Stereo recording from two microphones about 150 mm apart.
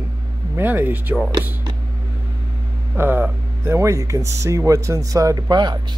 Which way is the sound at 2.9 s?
15° right (ahead or behind).